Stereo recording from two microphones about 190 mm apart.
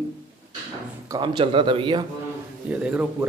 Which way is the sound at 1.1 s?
25° right (ahead or behind).